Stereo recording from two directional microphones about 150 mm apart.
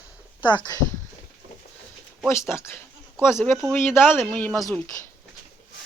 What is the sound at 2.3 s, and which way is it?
Speech, 15° left (ahead or behind).